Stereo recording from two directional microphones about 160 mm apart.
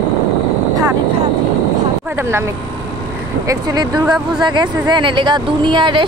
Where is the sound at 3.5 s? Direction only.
25° right (ahead or behind).